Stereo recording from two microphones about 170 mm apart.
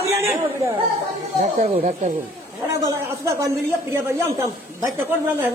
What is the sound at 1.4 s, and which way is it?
Speech, 50° right (ahead or behind).